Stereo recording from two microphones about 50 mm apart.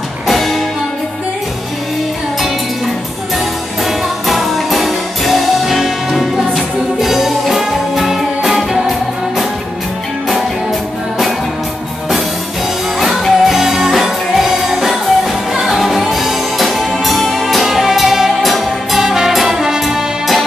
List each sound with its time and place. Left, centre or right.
0.3 s music: centre
4.3 s music: centre
13.0 s music: centre